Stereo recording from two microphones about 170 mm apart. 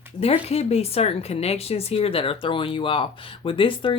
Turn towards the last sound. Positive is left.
turn(degrees=30)  # may be behind; listen again after turning